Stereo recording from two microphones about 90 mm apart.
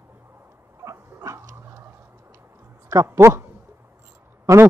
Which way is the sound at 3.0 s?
30° right (ahead or behind).